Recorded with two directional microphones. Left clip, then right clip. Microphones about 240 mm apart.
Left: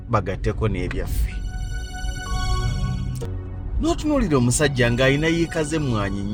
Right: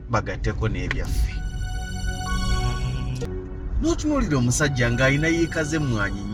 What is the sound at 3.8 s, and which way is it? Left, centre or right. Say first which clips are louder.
Speech: left 2 dB; left.